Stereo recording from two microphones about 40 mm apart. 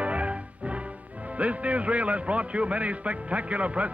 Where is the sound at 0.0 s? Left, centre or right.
Right.